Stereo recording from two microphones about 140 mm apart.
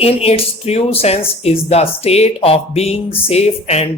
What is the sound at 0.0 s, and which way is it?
Speech, 45° left (ahead or behind).